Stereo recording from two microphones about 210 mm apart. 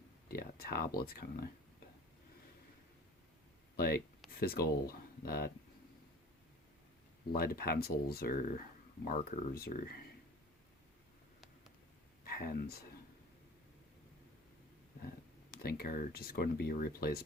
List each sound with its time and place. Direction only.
0.3 s speech: 45° left (ahead or behind)
3.8 s speech: 45° left (ahead or behind)
7.3 s speech: 45° left (ahead or behind)
12.2 s speech: 45° left (ahead or behind)
15.6 s speech: 45° left (ahead or behind)